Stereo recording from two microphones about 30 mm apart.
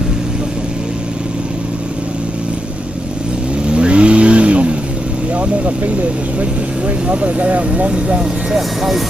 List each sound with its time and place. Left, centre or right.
3.6 s vehicle: right
7.1 s speech: right
8.5 s speech: centre